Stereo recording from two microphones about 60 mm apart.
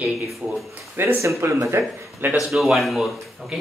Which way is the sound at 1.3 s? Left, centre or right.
Right.